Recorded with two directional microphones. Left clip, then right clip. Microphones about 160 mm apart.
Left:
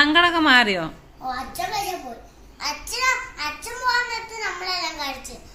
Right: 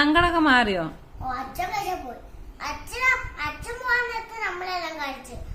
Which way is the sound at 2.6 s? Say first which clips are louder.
Left 3 dB; 20° right (ahead or behind).